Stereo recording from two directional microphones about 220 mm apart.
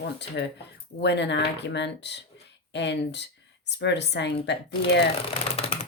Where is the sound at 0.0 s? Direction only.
50° left (ahead or behind).